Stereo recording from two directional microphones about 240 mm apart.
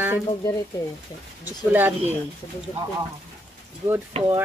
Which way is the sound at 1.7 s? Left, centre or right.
Centre.